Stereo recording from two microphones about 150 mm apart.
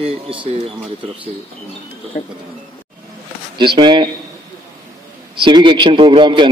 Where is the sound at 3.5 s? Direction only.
30° right (ahead or behind).